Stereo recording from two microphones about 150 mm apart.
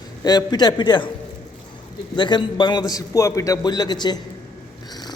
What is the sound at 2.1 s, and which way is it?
A man's voice, 30° left (ahead or behind).